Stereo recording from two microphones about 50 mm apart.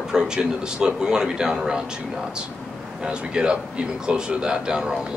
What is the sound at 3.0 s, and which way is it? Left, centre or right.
Speech, centre.